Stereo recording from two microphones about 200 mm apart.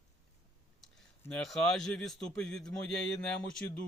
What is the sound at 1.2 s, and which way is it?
Speech, 5° left (ahead or behind).